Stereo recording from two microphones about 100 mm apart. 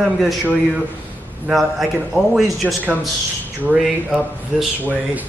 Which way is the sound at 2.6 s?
15° right (ahead or behind).